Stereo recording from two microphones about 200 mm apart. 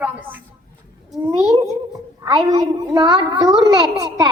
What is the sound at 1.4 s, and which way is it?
A woman's voice, 15° right (ahead or behind).